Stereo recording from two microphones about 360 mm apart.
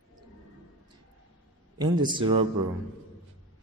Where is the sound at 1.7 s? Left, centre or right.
Centre.